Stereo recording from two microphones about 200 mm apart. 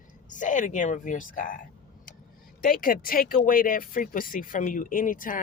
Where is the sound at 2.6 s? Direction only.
45° left (ahead or behind).